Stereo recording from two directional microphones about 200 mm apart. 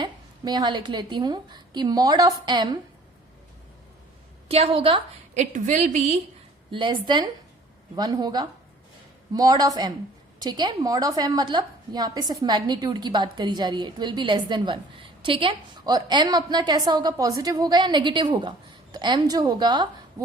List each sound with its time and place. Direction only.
0.0 s a woman's voice: 20° right (ahead or behind)
4.4 s a woman's voice: 30° right (ahead or behind)
6.7 s a woman's voice: 25° right (ahead or behind)